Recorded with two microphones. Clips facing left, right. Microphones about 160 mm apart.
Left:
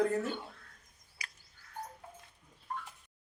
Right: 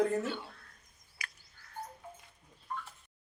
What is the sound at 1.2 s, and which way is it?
Frog, 35° left (ahead or behind).